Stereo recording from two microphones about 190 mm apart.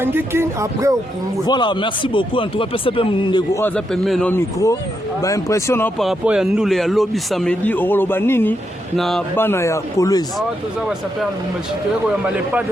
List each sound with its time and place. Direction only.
0.0 s speech: 10° right (ahead or behind)
1.5 s speech: 25° left (ahead or behind)
3.6 s speech: 5° left (ahead or behind)
6.0 s speech: centre (ahead or behind)
9.0 s speech: centre (ahead or behind)
9.3 s speech: 10° left (ahead or behind)